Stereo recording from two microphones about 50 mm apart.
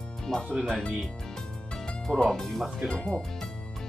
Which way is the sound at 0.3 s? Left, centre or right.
Centre.